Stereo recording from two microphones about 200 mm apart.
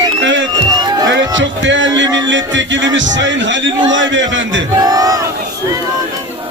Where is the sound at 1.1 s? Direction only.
65° right (ahead or behind).